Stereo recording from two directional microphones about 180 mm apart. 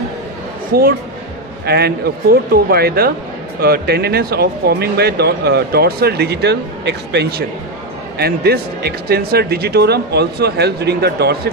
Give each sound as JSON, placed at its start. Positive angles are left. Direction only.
{"t": 0.7, "sound": "speech", "side_deg": -55}